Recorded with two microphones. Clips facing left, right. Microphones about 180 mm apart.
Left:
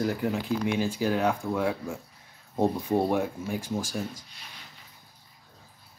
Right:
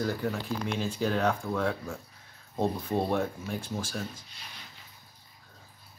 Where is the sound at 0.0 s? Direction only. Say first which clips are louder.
Left 3 dB; 15° left (ahead or behind).